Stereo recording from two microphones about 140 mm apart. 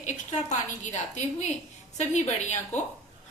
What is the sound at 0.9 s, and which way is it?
A woman's voice, 60° left (ahead or behind).